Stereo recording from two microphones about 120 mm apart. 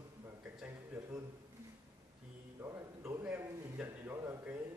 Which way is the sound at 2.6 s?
25° right (ahead or behind).